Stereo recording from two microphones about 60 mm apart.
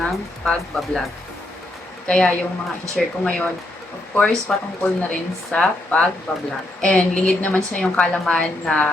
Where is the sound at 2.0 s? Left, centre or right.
Centre.